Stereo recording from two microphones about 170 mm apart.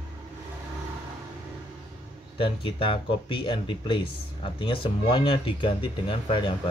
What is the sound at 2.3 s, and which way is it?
Speech, 30° left (ahead or behind).